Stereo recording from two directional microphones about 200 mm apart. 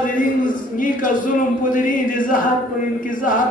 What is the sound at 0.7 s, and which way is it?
Speech, 40° left (ahead or behind).